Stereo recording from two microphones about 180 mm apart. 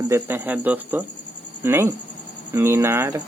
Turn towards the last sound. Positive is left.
turn(degrees=-15)  # may be behind; listen again after turning